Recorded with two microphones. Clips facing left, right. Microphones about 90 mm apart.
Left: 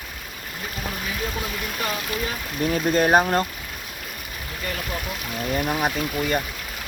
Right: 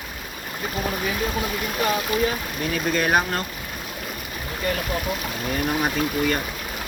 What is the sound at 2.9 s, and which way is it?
Speech, 35° left (ahead or behind).